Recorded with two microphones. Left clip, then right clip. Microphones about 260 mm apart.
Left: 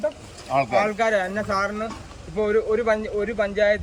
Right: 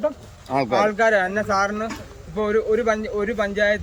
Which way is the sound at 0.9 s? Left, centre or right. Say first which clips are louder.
Right 3 dB; centre.